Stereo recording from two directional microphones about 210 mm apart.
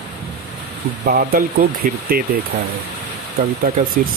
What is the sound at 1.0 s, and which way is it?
Speech, 45° right (ahead or behind).